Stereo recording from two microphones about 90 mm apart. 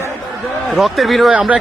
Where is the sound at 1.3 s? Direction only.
15° right (ahead or behind).